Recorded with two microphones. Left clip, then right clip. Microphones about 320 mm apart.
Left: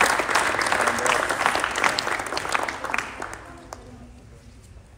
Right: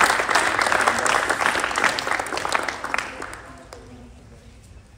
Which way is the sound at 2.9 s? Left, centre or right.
Right.